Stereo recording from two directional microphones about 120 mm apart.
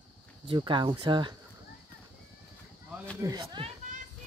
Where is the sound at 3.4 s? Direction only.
45° right (ahead or behind).